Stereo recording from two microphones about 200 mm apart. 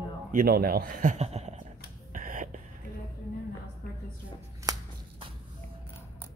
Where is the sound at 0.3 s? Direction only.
45° right (ahead or behind).